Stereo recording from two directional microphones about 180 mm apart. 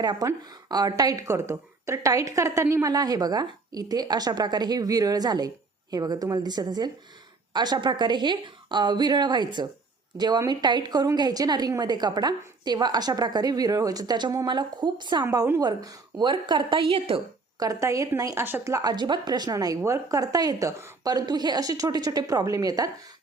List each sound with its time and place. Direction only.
0.0 s a woman's voice: 20° right (ahead or behind)
17.6 s a woman's voice: 15° right (ahead or behind)